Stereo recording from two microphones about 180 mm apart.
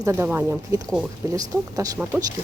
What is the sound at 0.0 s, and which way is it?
Speech, 15° right (ahead or behind).